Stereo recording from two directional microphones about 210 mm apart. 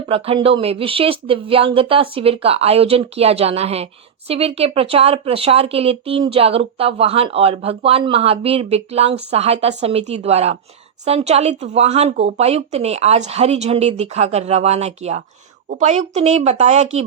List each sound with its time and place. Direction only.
0.1 s speech: 25° right (ahead or behind)